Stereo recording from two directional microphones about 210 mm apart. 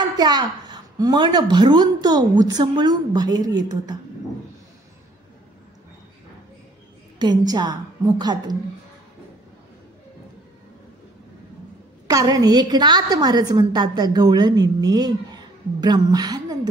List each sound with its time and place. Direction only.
0.2 s a woman's voice: 20° right (ahead or behind)
7.2 s a woman's voice: 20° right (ahead or behind)
12.1 s a woman's voice: 15° right (ahead or behind)